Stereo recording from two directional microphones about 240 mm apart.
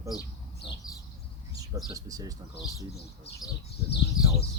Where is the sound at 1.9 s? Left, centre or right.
Centre.